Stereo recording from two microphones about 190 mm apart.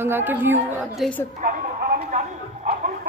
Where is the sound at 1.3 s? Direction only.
45° right (ahead or behind).